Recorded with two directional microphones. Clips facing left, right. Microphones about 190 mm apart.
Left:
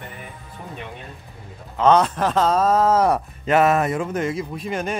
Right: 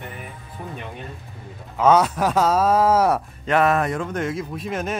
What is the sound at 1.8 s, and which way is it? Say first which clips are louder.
Speech: even; 10° right (ahead or behind).